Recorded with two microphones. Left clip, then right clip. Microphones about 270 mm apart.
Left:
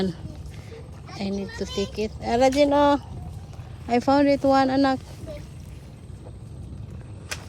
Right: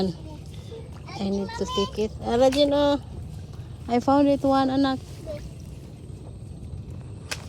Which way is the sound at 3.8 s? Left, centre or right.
Centre.